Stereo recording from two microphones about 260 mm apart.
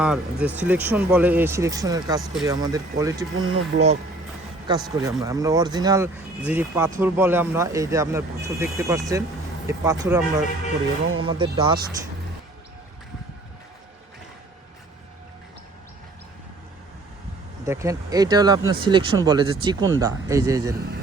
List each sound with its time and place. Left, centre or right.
0.0 s speech: centre
3.4 s speech: right
17.7 s speech: centre